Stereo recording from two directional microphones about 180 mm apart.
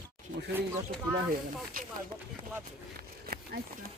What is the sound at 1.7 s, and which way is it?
Speech, 50° right (ahead or behind).